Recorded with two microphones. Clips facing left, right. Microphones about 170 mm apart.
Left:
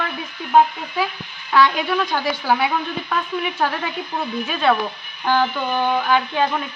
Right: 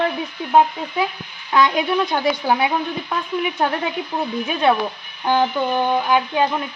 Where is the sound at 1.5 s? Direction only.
20° right (ahead or behind).